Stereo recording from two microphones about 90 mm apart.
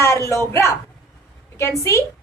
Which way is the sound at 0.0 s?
35° left (ahead or behind).